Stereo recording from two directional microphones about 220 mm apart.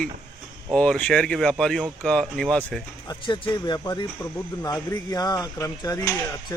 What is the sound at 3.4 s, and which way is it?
Speech, 15° left (ahead or behind).